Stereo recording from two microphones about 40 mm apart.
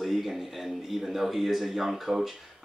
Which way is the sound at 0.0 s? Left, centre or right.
Centre.